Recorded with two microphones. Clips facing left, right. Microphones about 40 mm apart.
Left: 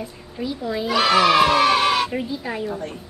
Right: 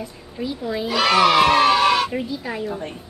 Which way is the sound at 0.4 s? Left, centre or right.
Centre.